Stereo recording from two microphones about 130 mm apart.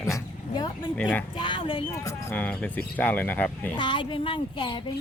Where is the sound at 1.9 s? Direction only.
25° left (ahead or behind).